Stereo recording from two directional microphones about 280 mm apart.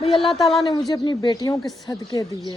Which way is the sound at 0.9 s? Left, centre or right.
Centre.